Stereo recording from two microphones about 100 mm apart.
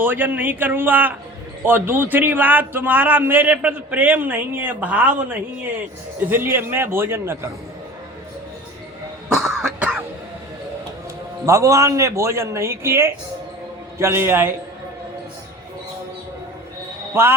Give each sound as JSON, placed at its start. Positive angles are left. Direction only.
{"t": 0.0, "sound": "a man's voice", "side_deg": -20}
{"t": 9.3, "sound": "cough", "side_deg": 0}
{"t": 11.4, "sound": "a man's voice", "side_deg": -30}
{"t": 17.2, "sound": "a man's voice", "side_deg": -25}